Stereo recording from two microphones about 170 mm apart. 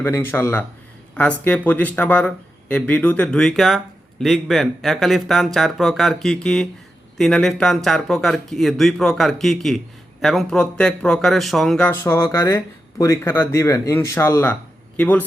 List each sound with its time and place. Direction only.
0.0 s speech: 15° left (ahead or behind)
11.9 s speech: 15° left (ahead or behind)